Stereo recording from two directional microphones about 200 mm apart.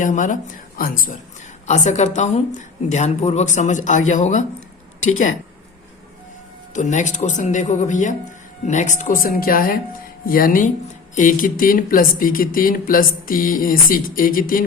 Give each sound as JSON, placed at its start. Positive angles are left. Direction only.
{"t": 0.0, "sound": "speech", "side_deg": 40}
{"t": 6.7, "sound": "speech", "side_deg": 35}